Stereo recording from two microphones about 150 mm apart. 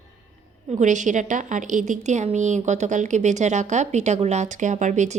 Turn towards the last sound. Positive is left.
turn(degrees=-50)  # may be behind; listen again after turning